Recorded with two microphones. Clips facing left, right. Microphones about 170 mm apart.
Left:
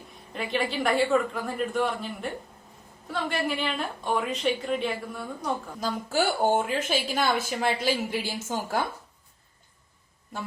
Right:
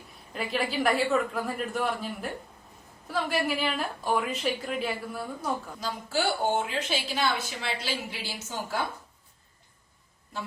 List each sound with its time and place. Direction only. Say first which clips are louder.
0.3 s a woman's voice: left 1 dB; centre (ahead or behind)
5.8 s a woman's voice: left 4 dB; 50° left (ahead or behind)